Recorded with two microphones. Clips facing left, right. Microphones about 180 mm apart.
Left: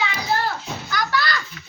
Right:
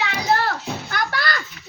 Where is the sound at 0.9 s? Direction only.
50° right (ahead or behind).